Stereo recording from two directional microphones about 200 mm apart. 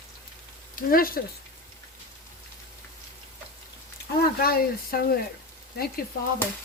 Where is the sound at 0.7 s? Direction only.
45° left (ahead or behind).